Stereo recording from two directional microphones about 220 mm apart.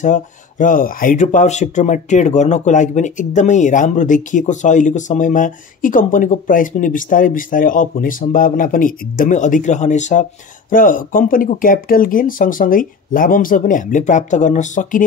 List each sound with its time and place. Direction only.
0.0 s speech: 35° left (ahead or behind)